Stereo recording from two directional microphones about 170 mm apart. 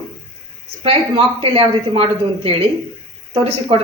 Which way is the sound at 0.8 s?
35° right (ahead or behind).